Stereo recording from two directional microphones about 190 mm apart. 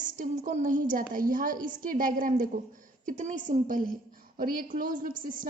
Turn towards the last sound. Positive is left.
turn(degrees=-45)  # may be behind; listen again after turning